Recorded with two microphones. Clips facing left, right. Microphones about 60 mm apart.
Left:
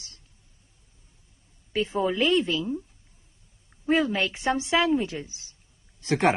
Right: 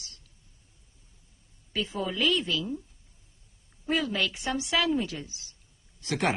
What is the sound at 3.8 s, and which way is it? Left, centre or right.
A man's voice, left.